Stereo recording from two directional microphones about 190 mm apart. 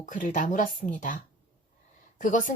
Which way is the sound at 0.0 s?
45° left (ahead or behind).